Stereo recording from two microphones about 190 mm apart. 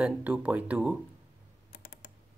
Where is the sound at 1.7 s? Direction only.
60° left (ahead or behind).